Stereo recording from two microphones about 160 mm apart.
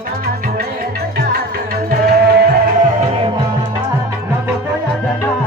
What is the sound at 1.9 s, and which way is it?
Music, 70° right (ahead or behind).